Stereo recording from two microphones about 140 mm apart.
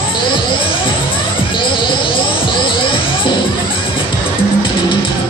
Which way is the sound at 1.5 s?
35° left (ahead or behind).